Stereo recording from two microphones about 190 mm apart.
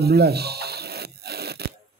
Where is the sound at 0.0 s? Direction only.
55° right (ahead or behind).